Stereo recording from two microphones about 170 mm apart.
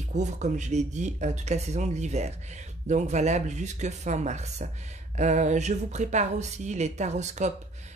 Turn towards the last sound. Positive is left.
turn(degrees=-45)  # may be behind; listen again after turning